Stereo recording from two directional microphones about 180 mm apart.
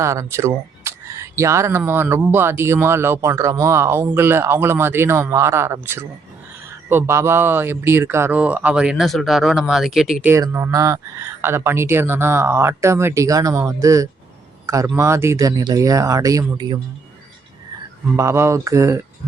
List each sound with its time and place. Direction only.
0.0 s speech: 15° right (ahead or behind)
10.2 s speech: 15° right (ahead or behind)
18.2 s speech: 15° right (ahead or behind)